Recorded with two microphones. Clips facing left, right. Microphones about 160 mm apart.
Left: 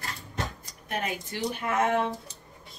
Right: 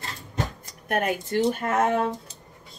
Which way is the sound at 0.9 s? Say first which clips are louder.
Right 8 dB; 55° right (ahead or behind).